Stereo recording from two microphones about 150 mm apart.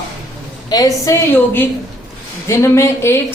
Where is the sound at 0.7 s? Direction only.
25° left (ahead or behind).